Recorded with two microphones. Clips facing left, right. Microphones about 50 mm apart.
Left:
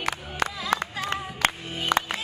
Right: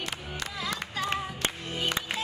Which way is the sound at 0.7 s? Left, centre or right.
Left.